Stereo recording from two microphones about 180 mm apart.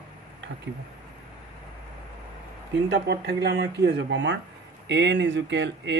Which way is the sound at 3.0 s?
65° right (ahead or behind).